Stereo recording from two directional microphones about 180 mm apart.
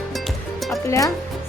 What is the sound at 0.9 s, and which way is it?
Speech, 20° left (ahead or behind).